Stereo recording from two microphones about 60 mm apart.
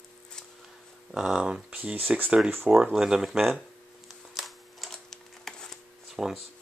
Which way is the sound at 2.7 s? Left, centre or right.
Centre.